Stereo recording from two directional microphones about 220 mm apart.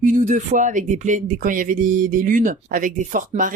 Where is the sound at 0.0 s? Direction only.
35° right (ahead or behind).